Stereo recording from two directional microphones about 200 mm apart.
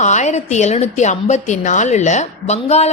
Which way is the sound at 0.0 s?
35° left (ahead or behind).